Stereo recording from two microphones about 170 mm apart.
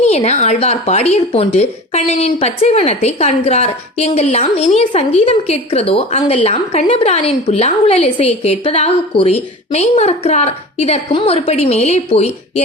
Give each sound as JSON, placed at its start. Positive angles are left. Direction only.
{"t": 0.0, "sound": "speech", "side_deg": 40}